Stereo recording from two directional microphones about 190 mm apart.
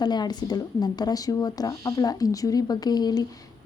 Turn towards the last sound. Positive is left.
turn(degrees=20)  # may be behind; listen again after turning